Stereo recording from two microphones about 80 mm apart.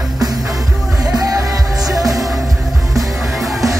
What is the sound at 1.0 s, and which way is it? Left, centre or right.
Music, right.